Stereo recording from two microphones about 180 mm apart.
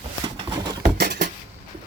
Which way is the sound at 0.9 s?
60° right (ahead or behind).